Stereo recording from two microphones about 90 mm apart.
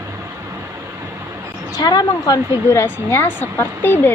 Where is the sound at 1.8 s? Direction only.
50° left (ahead or behind).